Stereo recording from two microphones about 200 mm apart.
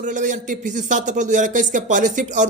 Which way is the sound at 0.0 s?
40° right (ahead or behind).